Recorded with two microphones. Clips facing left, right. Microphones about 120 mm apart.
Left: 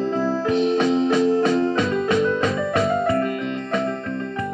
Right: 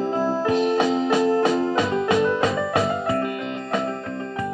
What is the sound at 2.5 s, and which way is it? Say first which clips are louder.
Music: left 2 dB; 25° right (ahead or behind).